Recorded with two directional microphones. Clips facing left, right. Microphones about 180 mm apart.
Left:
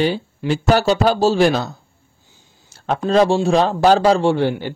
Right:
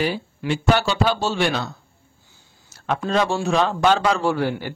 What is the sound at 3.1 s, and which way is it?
Speech, 30° left (ahead or behind).